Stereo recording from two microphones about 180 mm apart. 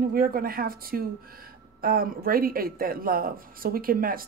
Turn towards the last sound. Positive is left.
turn(degrees=-55)  # may be behind; listen again after turning